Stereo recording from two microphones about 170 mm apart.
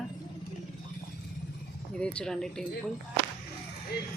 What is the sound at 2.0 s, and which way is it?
Speech, 5° left (ahead or behind).